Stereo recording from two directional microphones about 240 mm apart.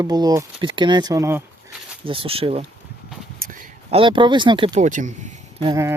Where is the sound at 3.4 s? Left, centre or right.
Right.